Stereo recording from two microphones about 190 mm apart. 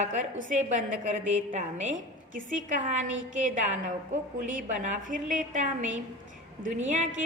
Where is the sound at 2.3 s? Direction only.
40° right (ahead or behind).